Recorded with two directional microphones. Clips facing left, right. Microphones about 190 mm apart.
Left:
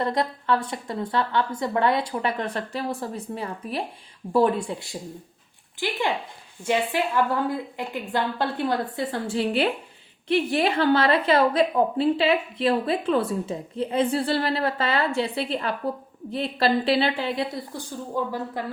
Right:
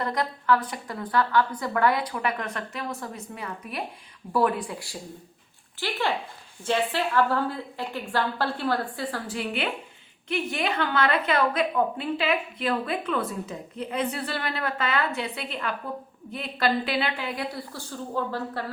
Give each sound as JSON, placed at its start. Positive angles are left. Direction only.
{"t": 0.0, "sound": "a woman's voice", "side_deg": 25}